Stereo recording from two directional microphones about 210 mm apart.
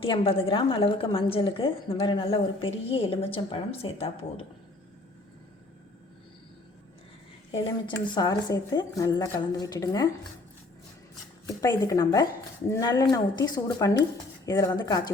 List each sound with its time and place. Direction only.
0.0 s a woman's voice: 25° left (ahead or behind)
7.6 s speech: 20° left (ahead or behind)
11.9 s a woman's voice: 15° left (ahead or behind)